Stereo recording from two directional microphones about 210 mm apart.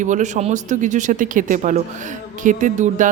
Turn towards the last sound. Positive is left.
turn(degrees=-35)  # may be behind; listen again after turning